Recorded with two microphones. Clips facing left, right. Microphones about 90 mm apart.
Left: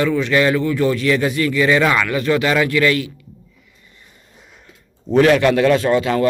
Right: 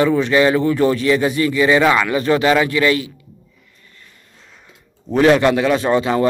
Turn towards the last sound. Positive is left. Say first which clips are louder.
# even
turn(degrees=-20)  # may be behind; listen again after turning